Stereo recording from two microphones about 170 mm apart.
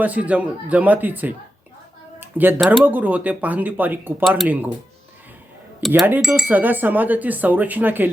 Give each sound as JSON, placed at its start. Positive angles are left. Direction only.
{"t": 0.0, "sound": "speech", "side_deg": -10}
{"t": 4.2, "sound": "speech", "side_deg": 0}
{"t": 5.8, "sound": "speech", "side_deg": 0}